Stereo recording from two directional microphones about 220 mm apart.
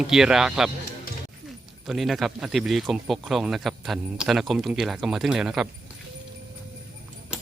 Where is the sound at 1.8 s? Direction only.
Centre (ahead or behind).